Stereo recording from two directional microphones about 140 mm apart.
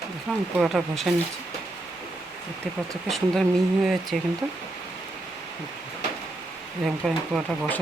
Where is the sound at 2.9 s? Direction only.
5° left (ahead or behind).